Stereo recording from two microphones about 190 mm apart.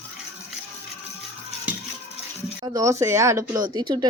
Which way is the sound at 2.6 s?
20° right (ahead or behind).